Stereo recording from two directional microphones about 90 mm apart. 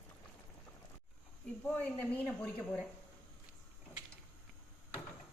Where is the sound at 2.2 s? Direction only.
10° left (ahead or behind).